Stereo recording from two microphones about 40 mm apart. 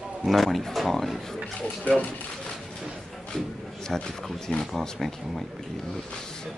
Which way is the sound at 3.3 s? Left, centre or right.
Centre.